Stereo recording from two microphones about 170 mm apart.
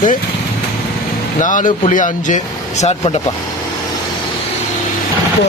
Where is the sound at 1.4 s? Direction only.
50° left (ahead or behind).